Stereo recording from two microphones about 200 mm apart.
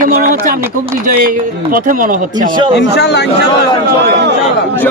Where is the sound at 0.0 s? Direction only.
45° right (ahead or behind).